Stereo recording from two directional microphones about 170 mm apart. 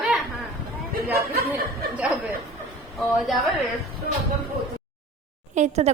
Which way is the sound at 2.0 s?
10° right (ahead or behind).